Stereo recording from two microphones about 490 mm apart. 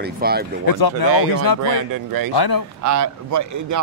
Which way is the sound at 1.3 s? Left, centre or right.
Left.